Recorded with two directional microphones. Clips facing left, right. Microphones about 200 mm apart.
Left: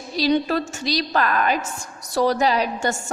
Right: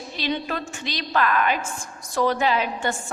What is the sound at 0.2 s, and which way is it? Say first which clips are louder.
A woman's voice: left 8 dB; 40° left (ahead or behind).